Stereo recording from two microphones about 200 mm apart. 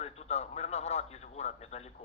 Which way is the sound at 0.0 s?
30° left (ahead or behind).